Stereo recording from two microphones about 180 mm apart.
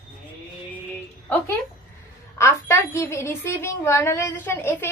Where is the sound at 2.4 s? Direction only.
15° left (ahead or behind).